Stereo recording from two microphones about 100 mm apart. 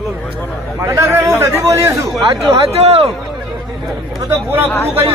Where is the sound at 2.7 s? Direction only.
85° right.